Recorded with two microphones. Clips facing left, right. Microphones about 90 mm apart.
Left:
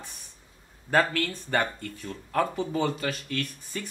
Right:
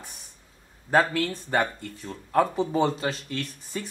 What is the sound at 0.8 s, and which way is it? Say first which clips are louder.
Speech: right 2 dB; 15° right (ahead or behind).